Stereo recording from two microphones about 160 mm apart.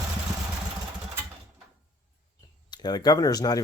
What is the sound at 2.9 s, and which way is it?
Speech, 25° left (ahead or behind).